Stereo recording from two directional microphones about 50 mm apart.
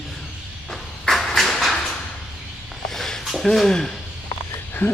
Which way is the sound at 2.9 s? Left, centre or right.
Centre.